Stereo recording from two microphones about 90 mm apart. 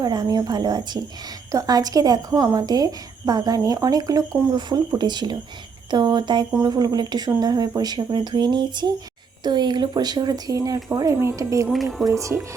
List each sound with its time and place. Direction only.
0.0 s a woman's voice: 50° right (ahead or behind)
11.7 s speech: centre (ahead or behind)
12.0 s a woman's voice: 35° right (ahead or behind)